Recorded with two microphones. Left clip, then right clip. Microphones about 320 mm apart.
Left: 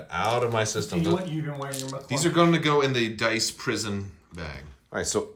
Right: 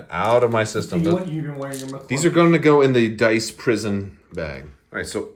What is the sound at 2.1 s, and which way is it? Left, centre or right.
Speech, centre.